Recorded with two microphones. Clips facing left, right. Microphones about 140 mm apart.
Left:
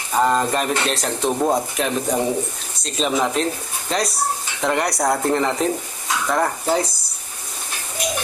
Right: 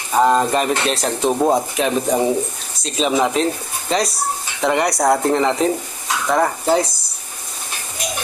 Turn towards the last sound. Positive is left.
turn(degrees=0)  # may be behind; listen again after turning